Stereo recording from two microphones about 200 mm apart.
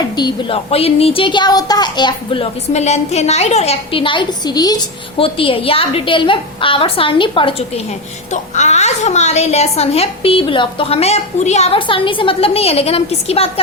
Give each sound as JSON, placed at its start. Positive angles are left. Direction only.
{"t": 0.2, "sound": "a woman's voice", "side_deg": 25}